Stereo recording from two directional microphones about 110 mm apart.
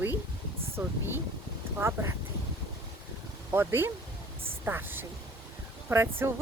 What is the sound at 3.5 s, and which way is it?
Speech, 20° right (ahead or behind).